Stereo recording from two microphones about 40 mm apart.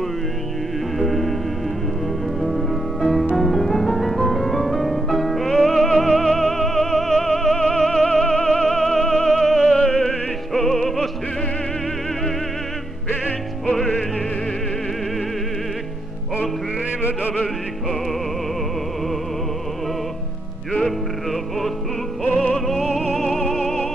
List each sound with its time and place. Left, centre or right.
0.9 s music: centre
2.4 s music: centre
8.6 s music: centre
10.5 s music: centre
20.8 s music: centre